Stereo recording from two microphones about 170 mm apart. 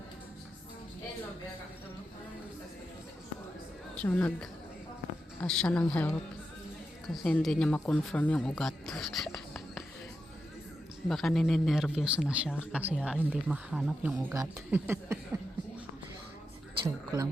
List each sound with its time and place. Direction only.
3.9 s a woman's voice: 10° left (ahead or behind)
11.1 s speech: centre (ahead or behind)
14.3 s speech: 15° right (ahead or behind)
16.8 s a sound: 20° right (ahead or behind)